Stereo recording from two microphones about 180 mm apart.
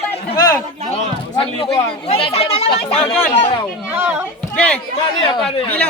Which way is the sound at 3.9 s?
10° right (ahead or behind).